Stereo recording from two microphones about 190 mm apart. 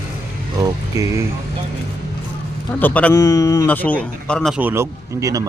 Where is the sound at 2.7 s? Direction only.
10° left (ahead or behind).